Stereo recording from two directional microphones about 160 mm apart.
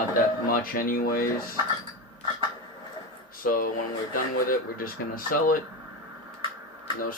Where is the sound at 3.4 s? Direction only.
60° left (ahead or behind).